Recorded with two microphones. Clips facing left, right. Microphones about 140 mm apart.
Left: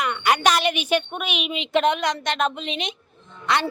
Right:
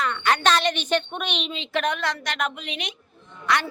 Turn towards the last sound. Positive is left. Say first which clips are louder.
# left 1 dB
turn(degrees=25)  # may be behind; listen again after turning